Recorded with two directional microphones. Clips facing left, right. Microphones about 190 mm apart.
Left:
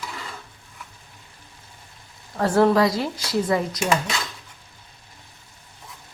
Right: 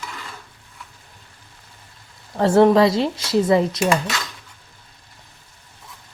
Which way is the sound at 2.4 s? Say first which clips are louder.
Right 4 dB; 25° right (ahead or behind).